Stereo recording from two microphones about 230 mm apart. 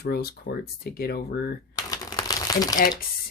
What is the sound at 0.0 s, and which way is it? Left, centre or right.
Speech, left.